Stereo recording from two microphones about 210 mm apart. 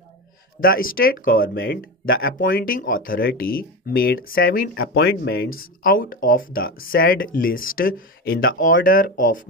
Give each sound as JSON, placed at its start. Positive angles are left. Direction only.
{"t": 0.6, "sound": "speech", "side_deg": 45}